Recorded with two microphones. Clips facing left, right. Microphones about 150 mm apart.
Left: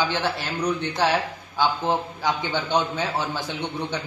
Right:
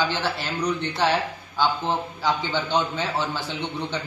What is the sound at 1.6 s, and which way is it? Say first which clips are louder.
A man's voice: left 1 dB; 15° left (ahead or behind).